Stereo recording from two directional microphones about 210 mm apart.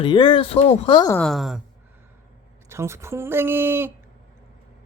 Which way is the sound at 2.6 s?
10° right (ahead or behind).